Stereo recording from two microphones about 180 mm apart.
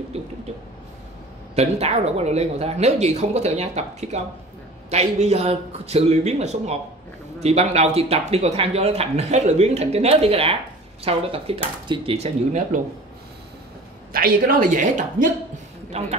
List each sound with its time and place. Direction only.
0.1 s speech: 35° right (ahead or behind)
1.5 s speech: 35° right (ahead or behind)
14.1 s a woman's voice: 55° right (ahead or behind); by 16.1 s 35° right (ahead or behind)